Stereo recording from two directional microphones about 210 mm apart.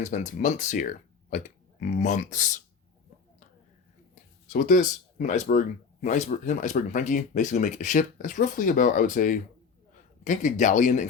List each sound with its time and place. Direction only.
0.0 s speech: 35° left (ahead or behind)
4.4 s speech: 40° left (ahead or behind)